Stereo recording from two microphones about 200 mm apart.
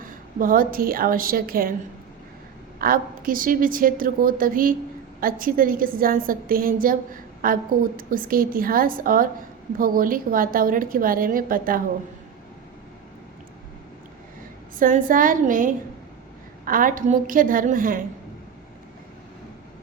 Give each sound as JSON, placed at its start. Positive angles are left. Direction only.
{"t": 0.0, "sound": "a woman's voice", "side_deg": -45}
{"t": 2.7, "sound": "a woman's voice", "side_deg": -45}
{"t": 14.8, "sound": "a woman's voice", "side_deg": -45}